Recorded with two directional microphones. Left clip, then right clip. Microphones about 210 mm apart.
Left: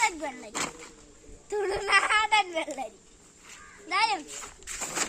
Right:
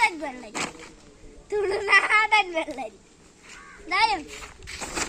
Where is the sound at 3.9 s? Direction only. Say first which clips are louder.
Right 4 dB; 10° left (ahead or behind).